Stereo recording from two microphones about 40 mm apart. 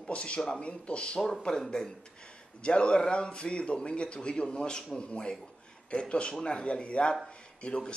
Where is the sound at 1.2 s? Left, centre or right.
Centre.